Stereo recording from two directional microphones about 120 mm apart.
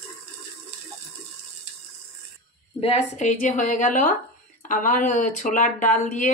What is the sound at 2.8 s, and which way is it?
Speech, 65° left (ahead or behind).